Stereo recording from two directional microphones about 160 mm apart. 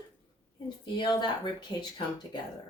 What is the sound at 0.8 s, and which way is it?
Speech, 30° left (ahead or behind).